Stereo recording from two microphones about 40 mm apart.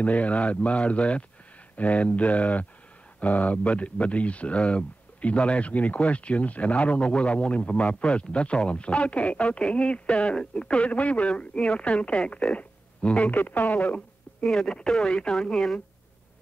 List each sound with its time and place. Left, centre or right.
0.0 s speech: left
13.3 s speech: left
14.4 s speech: centre
15.0 s speech: left